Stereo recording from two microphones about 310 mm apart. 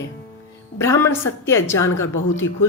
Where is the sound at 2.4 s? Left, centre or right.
Left.